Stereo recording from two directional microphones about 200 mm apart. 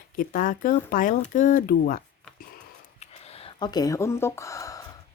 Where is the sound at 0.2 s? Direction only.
40° left (ahead or behind).